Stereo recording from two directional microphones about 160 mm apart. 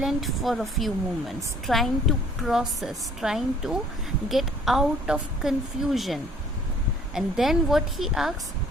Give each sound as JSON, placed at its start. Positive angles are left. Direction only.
{"t": 0.0, "sound": "a woman's voice", "side_deg": 0}